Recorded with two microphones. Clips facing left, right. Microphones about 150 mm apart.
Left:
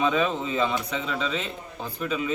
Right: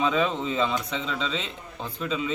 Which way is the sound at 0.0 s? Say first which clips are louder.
Even; 5° left (ahead or behind).